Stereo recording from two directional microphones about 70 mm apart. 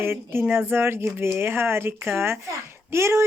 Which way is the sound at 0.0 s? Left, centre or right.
Right.